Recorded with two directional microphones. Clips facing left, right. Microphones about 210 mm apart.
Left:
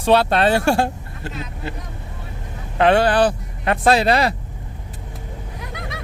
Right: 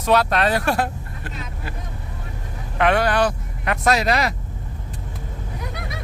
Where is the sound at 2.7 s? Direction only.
30° left (ahead or behind).